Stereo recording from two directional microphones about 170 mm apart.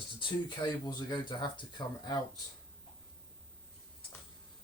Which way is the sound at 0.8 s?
25° left (ahead or behind).